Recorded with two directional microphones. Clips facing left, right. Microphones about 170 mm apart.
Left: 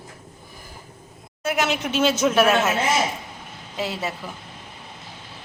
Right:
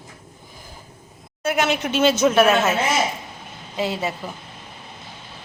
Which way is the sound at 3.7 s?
Centre (ahead or behind).